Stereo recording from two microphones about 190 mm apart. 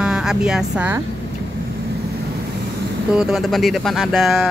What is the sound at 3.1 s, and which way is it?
Speech, centre (ahead or behind).